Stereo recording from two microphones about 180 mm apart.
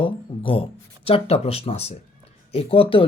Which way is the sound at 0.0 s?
30° left (ahead or behind).